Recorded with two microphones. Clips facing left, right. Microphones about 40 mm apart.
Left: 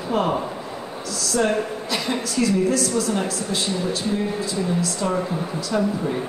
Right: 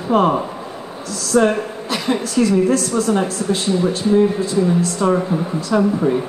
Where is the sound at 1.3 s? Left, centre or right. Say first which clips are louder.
Right 6 dB; right.